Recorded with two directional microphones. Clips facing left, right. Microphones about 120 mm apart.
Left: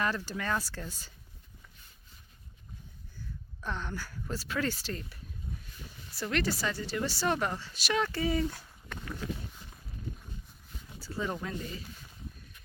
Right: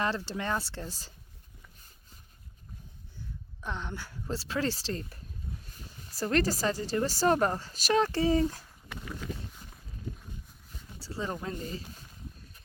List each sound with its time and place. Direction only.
0.0 s speech: 30° right (ahead or behind)
3.6 s a woman's voice: 20° right (ahead or behind); by 8.4 s 35° right (ahead or behind)
8.9 s wild animals: centre (ahead or behind)
11.0 s a sound: 30° right (ahead or behind)
11.4 s speech: 35° right (ahead or behind)